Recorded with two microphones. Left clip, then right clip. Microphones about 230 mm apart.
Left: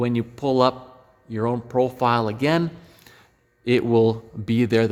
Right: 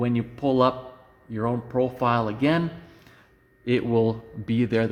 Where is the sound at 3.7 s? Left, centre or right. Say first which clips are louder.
Left 4 dB; left.